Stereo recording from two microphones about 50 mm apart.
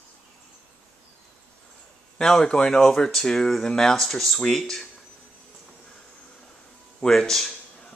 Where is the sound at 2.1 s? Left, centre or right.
Centre.